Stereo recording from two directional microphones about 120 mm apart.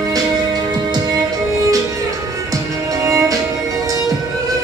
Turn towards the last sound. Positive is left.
turn(degrees=-25)  # may be behind; listen again after turning